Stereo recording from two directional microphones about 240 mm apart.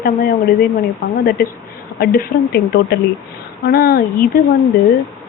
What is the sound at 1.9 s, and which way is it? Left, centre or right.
A woman's voice, left.